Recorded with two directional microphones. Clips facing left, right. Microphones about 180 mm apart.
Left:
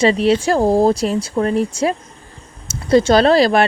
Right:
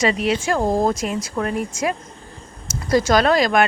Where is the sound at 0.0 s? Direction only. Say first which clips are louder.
Left 6 dB; 30° left (ahead or behind).